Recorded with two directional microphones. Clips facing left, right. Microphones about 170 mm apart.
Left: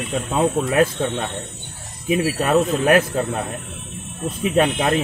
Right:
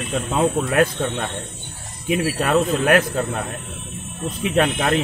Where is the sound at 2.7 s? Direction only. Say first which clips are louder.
Left 1 dB; 30° left (ahead or behind).